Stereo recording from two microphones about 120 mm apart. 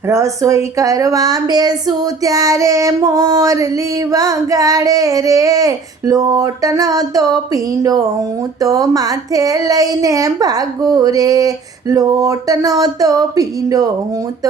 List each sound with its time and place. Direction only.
0.1 s child singing: 25° right (ahead or behind)
8.6 s speech: 30° right (ahead or behind)